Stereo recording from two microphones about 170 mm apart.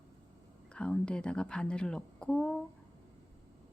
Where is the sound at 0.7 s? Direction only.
5° left (ahead or behind).